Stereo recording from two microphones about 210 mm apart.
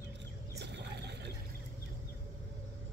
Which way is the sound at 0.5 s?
55° right (ahead or behind).